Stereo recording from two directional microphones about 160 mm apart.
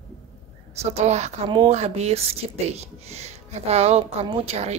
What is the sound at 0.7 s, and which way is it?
Speech, 40° right (ahead or behind).